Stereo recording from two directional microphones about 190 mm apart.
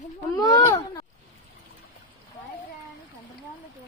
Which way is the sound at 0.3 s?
15° left (ahead or behind).